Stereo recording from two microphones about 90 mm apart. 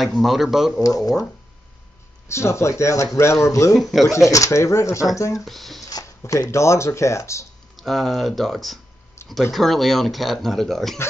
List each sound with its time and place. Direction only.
0.2 s speech: centre (ahead or behind)
0.8 s speech: 40° left (ahead or behind)
2.2 s speech: 30° left (ahead or behind)
3.7 s speech: centre (ahead or behind)
4.3 s speech: 35° left (ahead or behind)
5.4 s speech: centre (ahead or behind)
5.9 s a sound: 45° left (ahead or behind)
6.2 s speech: 35° left (ahead or behind)
7.7 s speech: centre (ahead or behind)